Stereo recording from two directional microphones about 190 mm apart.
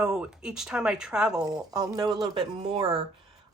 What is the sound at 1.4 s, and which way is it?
Speech, 15° right (ahead or behind).